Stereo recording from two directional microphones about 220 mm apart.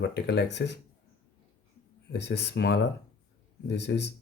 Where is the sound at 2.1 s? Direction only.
50° left (ahead or behind).